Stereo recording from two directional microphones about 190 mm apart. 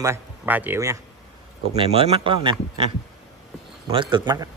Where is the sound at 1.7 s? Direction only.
30° right (ahead or behind).